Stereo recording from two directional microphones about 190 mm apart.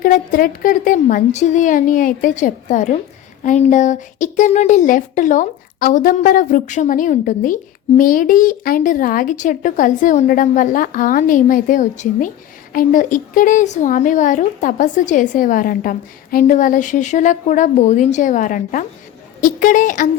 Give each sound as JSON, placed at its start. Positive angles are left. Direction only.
{"t": 0.0, "sound": "speech", "side_deg": 45}